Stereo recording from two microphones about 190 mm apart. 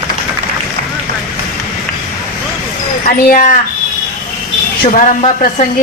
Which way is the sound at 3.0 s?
45° left (ahead or behind).